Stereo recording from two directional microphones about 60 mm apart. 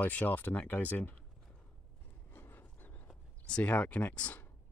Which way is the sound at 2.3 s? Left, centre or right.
Left.